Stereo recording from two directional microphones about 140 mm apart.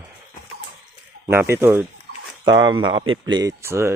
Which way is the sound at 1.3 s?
15° right (ahead or behind).